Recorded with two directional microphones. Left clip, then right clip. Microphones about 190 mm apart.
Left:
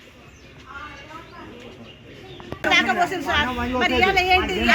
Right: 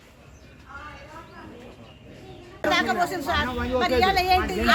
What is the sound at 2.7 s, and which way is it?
Speech, 10° right (ahead or behind).